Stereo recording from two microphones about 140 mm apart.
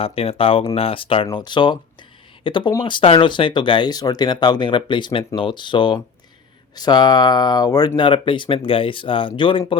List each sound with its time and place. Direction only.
0.0 s speech: 40° left (ahead or behind)